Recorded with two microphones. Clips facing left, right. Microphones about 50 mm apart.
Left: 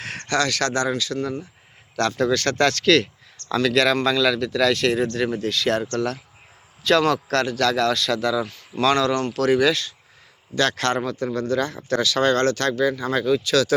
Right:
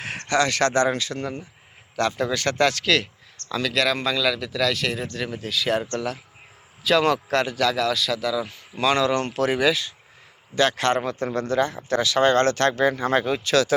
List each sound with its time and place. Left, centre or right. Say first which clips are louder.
0.3 s speech: right 1 dB; right
2.0 s speech: left 3 dB; centre
7.0 s speech: left 1 dB; centre
8.4 s speech: left 2 dB; centre